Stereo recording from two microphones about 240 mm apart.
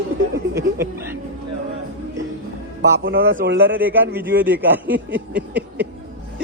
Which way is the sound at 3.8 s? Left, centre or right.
Centre.